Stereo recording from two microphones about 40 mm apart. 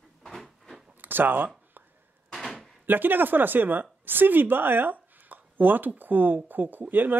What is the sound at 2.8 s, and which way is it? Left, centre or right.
Speech, right.